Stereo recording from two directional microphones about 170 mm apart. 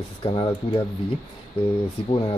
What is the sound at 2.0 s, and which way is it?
Speech, 35° left (ahead or behind).